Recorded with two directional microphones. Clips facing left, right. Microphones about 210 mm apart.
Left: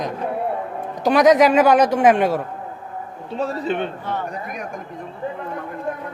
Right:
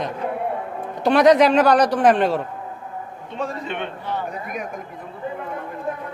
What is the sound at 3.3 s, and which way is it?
Speech, 35° left (ahead or behind).